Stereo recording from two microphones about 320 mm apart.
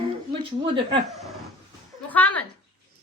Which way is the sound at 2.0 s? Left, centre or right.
Centre.